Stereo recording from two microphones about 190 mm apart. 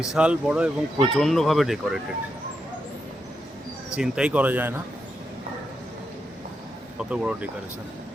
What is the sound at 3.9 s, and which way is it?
Speech, 5° right (ahead or behind).